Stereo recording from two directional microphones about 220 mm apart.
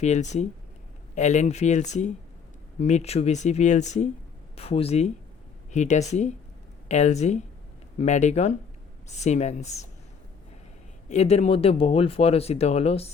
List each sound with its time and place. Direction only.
0.0 s speech: 30° left (ahead or behind)
11.1 s speech: 30° left (ahead or behind)